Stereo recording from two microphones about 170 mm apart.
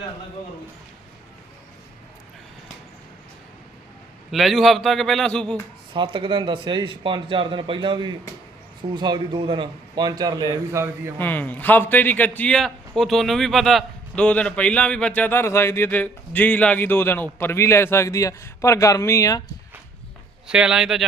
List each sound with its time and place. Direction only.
4.3 s a man's voice: centre (ahead or behind)
5.9 s a man's voice: 30° right (ahead or behind)
11.2 s a man's voice: 10° left (ahead or behind)
20.5 s a man's voice: 5° right (ahead or behind)